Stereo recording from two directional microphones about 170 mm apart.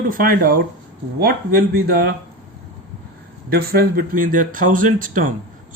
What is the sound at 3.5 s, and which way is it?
Speech, 65° right (ahead or behind).